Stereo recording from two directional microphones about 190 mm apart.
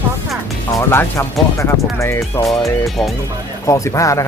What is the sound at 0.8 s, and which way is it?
Speech, 15° left (ahead or behind).